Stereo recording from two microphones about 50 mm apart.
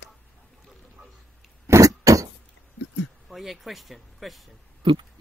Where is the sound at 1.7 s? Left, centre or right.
Right.